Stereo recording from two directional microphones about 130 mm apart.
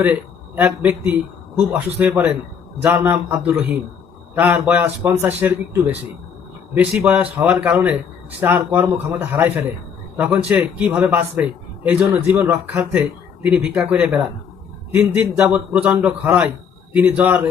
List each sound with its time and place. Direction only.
0.0 s a man's voice: 10° right (ahead or behind)
7.0 s a man's voice: 10° right (ahead or behind)
15.4 s a man's voice: 10° right (ahead or behind)